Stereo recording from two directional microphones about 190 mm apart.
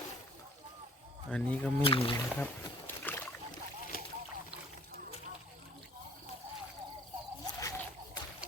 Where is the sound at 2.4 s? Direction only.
10° left (ahead or behind).